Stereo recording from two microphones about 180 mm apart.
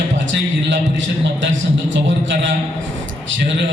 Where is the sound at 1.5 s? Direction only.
90° right.